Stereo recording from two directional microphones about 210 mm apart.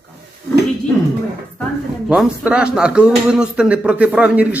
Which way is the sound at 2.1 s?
5° right (ahead or behind).